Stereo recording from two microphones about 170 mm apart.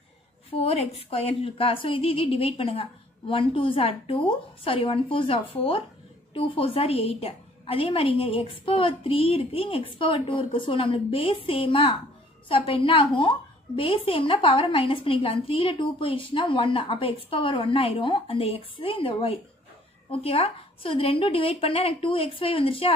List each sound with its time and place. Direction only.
0.6 s a woman's voice: 35° left (ahead or behind)